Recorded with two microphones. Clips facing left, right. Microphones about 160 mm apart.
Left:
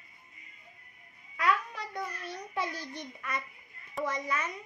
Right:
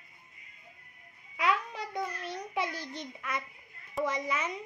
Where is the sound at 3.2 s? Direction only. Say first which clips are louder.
Even; 15° right (ahead or behind).